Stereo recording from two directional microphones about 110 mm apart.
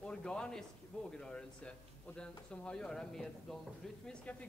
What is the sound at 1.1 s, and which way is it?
A man's voice, 10° left (ahead or behind).